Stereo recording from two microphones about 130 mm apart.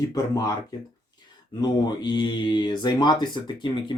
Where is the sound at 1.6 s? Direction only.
30° left (ahead or behind).